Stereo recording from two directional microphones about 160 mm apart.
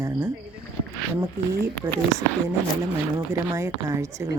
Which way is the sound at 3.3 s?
15° right (ahead or behind).